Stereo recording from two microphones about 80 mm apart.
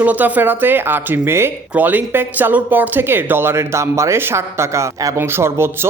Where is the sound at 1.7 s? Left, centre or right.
Right.